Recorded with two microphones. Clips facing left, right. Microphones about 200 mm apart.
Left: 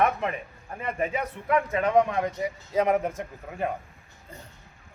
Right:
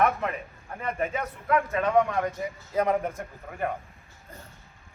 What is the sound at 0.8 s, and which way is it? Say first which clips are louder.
A man's voice: left 1 dB; 15° left (ahead or behind).